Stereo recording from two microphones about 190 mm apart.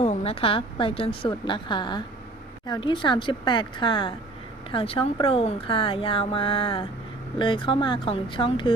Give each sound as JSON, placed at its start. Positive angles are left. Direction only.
{"t": 0.0, "sound": "speech", "side_deg": 30}